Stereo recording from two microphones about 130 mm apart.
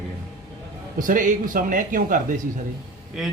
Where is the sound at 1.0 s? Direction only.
90° right.